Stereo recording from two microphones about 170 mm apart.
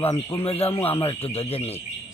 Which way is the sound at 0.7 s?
15° left (ahead or behind).